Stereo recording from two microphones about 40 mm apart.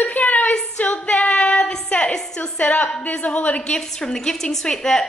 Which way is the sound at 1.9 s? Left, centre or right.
Left.